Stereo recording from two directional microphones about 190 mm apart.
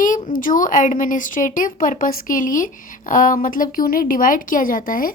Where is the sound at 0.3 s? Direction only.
45° left (ahead or behind).